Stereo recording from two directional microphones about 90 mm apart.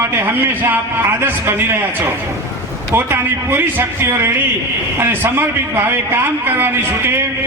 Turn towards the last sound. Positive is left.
turn(degrees=-25)  # may be behind; listen again after turning